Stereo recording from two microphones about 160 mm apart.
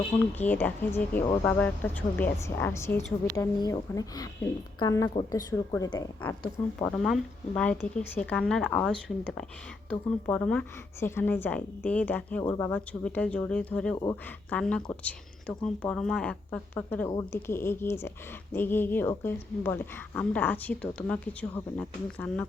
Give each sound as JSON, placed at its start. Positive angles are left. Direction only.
{"t": 0.3, "sound": "a woman's voice", "side_deg": 10}
{"t": 13.9, "sound": "speech", "side_deg": 20}
{"t": 14.5, "sound": "a woman's voice", "side_deg": 5}